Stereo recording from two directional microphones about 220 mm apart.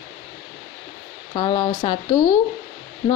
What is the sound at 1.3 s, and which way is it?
Speech, 20° left (ahead or behind).